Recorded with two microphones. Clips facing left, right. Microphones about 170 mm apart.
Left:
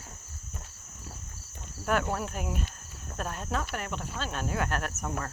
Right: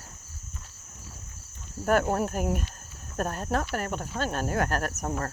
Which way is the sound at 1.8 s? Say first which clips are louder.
Right 5 dB; 45° right (ahead or behind).